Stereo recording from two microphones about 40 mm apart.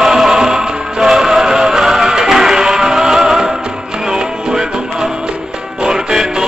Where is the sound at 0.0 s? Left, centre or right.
Centre.